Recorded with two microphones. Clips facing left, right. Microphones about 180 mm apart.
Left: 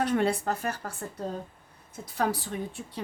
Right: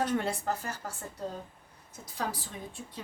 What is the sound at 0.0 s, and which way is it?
Speech, 65° left (ahead or behind).